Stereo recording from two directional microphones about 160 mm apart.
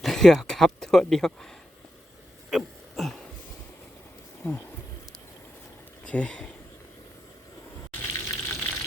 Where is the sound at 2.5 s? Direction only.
Centre (ahead or behind).